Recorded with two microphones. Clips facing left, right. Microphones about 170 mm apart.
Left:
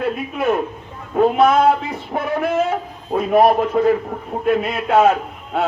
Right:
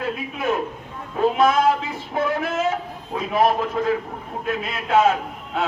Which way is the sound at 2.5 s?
55° left (ahead or behind).